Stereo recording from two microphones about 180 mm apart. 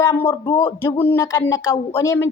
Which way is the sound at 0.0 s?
15° left (ahead or behind).